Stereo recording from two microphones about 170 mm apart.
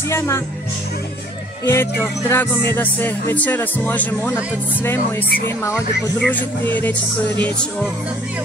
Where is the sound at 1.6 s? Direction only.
15° left (ahead or behind).